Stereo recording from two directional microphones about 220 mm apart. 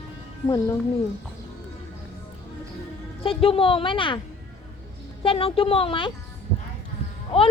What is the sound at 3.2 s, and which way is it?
Speech, 25° left (ahead or behind).